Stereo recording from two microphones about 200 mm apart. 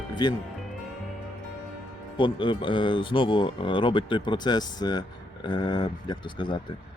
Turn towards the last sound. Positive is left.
turn(degrees=25)  # may be behind; listen again after turning